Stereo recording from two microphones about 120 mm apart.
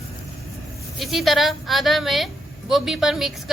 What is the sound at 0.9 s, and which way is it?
A woman's voice, centre (ahead or behind).